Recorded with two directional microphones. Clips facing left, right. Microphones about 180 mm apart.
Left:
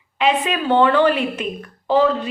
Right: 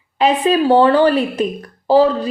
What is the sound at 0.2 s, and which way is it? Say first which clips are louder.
A woman's voice: right 5 dB; 35° right (ahead or behind).